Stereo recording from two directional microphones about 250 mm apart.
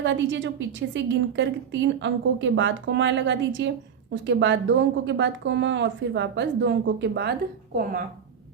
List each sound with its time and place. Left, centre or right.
0.0 s a woman's voice: right